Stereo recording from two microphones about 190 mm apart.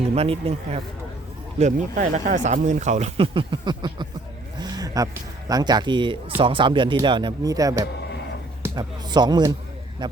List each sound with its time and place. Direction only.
0.1 s speech: 30° right (ahead or behind)
4.5 s a sound: 20° right (ahead or behind)
5.5 s speech: 20° right (ahead or behind)